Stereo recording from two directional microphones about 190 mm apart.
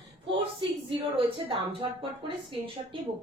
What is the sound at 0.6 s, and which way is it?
A woman's voice, 30° right (ahead or behind).